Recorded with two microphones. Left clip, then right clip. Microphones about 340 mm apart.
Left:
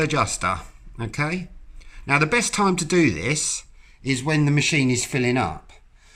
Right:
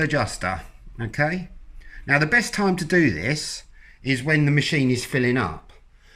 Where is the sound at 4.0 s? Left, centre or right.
Centre.